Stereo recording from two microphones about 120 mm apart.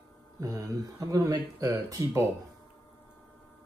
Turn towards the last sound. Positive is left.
turn(degrees=-30)  # may be behind; listen again after turning